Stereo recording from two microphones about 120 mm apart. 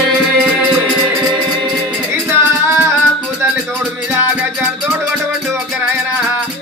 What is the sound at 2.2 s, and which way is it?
Music, 20° right (ahead or behind).